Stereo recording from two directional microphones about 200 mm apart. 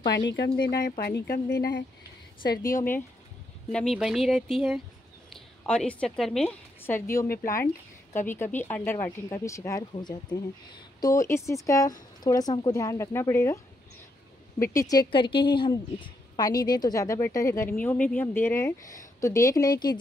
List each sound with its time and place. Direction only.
0.1 s speech: 60° left (ahead or behind)
3.7 s a woman's voice: centre (ahead or behind)
14.6 s a woman's voice: 15° left (ahead or behind)